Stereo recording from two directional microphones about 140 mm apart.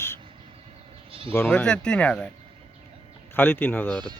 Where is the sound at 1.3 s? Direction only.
15° left (ahead or behind).